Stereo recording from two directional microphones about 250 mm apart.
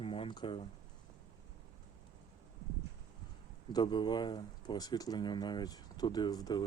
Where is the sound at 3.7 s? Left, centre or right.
Centre.